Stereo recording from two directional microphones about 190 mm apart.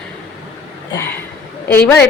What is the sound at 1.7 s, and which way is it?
Speech, 10° left (ahead or behind).